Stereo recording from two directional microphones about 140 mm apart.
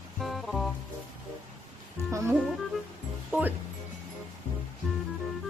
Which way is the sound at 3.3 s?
15° right (ahead or behind).